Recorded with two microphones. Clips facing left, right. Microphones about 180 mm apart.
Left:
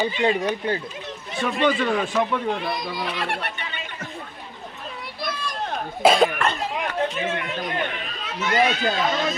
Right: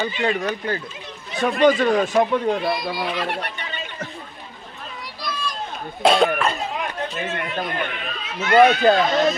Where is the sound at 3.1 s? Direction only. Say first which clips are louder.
Right 2 dB; 45° right (ahead or behind).